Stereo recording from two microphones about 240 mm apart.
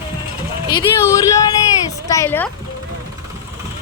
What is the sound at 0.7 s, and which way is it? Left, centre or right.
Speech, centre.